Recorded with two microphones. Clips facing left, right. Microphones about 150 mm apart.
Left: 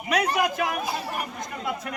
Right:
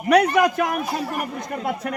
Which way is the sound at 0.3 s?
50° right (ahead or behind).